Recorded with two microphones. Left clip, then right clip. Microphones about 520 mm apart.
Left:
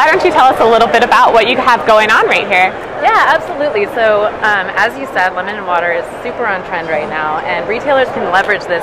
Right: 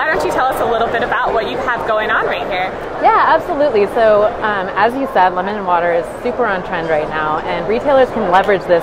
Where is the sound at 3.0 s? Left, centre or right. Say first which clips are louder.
Left 1 dB; right.